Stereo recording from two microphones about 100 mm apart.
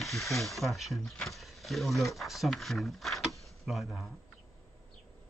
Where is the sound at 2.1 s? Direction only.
Centre (ahead or behind).